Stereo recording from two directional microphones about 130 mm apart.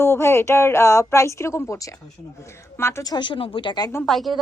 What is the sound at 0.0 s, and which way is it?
A woman's voice, 20° left (ahead or behind).